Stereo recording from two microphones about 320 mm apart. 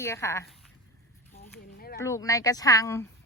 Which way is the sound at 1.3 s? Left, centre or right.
Left.